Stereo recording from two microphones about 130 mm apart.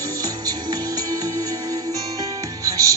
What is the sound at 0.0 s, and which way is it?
Music, 25° right (ahead or behind).